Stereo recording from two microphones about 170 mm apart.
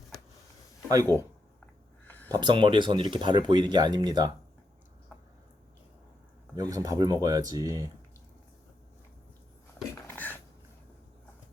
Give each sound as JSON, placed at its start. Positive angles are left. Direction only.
{"t": 1.1, "sound": "speech", "side_deg": 20}
{"t": 2.0, "sound": "a sound", "side_deg": 10}
{"t": 2.3, "sound": "speech", "side_deg": -30}
{"t": 6.6, "sound": "speech", "side_deg": -20}
{"t": 10.1, "sound": "dishes", "side_deg": 10}